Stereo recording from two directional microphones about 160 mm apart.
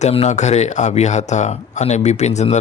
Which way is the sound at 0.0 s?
45° left (ahead or behind).